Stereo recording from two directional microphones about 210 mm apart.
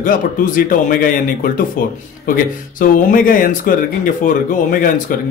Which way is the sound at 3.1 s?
40° left (ahead or behind).